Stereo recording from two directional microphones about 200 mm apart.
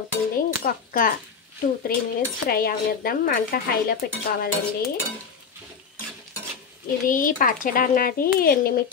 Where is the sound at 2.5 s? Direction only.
50° left (ahead or behind).